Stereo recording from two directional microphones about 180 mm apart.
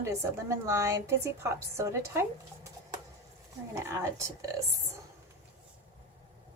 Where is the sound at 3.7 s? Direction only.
15° right (ahead or behind).